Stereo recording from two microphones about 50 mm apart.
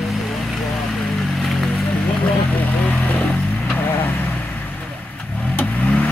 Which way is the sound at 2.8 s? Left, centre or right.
Left.